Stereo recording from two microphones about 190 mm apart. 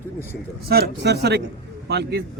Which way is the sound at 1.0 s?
60° right (ahead or behind).